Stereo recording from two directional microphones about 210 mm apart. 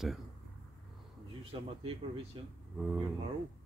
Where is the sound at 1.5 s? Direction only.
25° right (ahead or behind).